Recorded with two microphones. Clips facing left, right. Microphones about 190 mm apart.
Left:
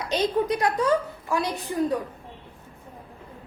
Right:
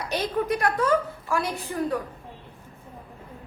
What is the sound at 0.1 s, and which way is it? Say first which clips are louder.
A woman's voice: left 3 dB; 20° left (ahead or behind).